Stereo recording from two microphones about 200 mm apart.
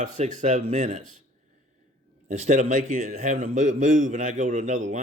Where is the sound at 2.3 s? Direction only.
35° right (ahead or behind).